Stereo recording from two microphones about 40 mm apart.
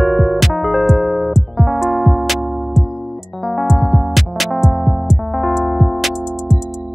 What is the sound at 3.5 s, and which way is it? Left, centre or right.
Music, centre.